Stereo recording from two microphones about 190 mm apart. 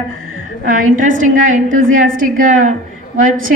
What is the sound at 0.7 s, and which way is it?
A woman's voice, 45° right (ahead or behind).